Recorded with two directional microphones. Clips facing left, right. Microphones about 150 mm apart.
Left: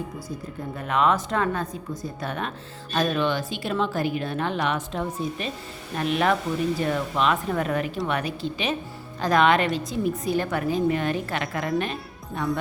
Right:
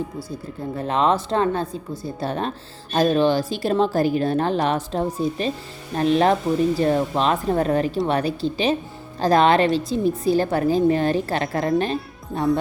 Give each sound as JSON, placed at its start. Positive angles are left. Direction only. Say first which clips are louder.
{"t": 0.8, "sound": "a woman's voice", "louder": "right 2 dB", "side_deg": -30}